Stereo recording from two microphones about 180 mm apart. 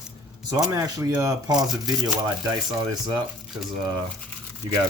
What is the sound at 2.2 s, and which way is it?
Speech, 20° right (ahead or behind).